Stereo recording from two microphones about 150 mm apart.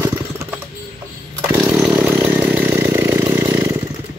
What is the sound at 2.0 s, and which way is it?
Chainsaw, 10° right (ahead or behind).